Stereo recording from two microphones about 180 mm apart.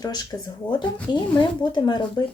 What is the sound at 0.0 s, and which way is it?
Speech, 20° left (ahead or behind).